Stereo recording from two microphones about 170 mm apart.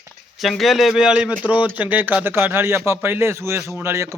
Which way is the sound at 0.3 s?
Centre (ahead or behind).